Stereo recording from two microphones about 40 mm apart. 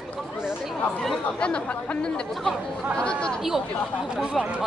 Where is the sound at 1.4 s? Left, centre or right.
Left.